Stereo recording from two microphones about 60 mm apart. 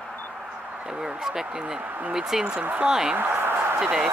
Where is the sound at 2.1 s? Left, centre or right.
Centre.